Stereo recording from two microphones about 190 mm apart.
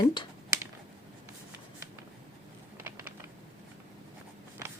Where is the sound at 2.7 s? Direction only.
10° right (ahead or behind).